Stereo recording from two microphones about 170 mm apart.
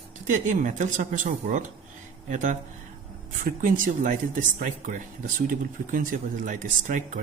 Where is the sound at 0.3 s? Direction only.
45° right (ahead or behind).